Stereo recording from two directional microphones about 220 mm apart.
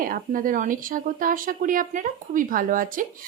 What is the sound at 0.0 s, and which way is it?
A woman's voice, 40° right (ahead or behind).